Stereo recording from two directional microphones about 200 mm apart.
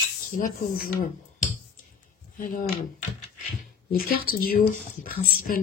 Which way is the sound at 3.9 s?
45° left (ahead or behind).